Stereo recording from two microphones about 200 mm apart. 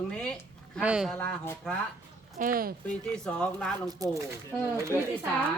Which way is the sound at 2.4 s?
45° right (ahead or behind).